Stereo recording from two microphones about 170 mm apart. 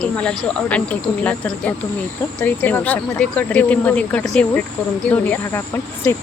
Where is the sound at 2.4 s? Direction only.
10° left (ahead or behind).